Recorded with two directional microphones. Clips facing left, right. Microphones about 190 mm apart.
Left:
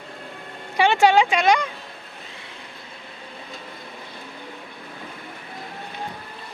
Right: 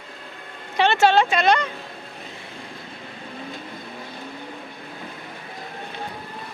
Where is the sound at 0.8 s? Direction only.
10° left (ahead or behind).